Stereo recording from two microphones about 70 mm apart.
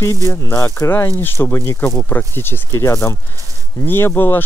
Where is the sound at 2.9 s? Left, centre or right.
Left.